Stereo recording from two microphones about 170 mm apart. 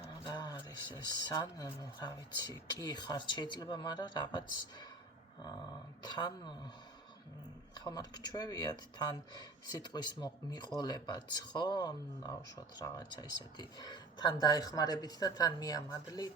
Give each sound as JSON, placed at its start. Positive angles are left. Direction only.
{"t": 0.3, "sound": "a sound", "side_deg": 25}
{"t": 1.1, "sound": "speech", "side_deg": 25}
{"t": 6.0, "sound": "speech", "side_deg": 25}
{"t": 7.9, "sound": "speech", "side_deg": 25}